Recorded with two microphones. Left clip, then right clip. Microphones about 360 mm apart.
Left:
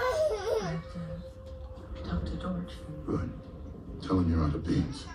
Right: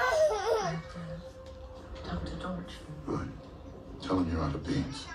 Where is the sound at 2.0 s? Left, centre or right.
Right.